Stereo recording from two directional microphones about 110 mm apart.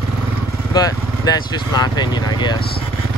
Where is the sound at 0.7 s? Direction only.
35° left (ahead or behind).